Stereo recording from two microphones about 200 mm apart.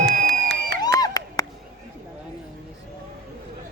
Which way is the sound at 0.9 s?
20° left (ahead or behind).